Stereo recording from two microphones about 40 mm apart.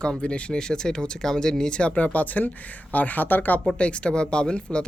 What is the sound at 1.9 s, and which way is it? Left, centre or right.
Speech, left.